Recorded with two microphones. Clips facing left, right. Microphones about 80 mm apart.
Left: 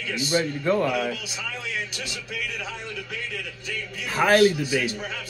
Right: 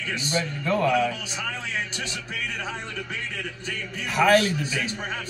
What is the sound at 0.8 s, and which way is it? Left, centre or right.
A man's voice, right.